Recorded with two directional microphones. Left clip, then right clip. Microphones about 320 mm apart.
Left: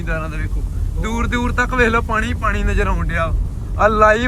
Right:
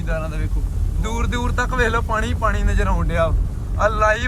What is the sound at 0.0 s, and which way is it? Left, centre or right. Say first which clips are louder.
Speech: left 2 dB; centre.